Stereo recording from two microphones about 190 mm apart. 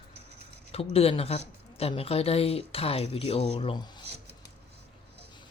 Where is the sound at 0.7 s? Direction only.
30° left (ahead or behind).